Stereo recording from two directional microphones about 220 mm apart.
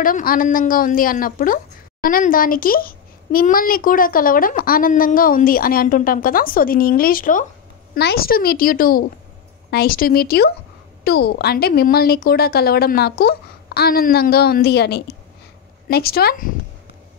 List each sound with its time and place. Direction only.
0.0 s a woman's voice: 40° left (ahead or behind)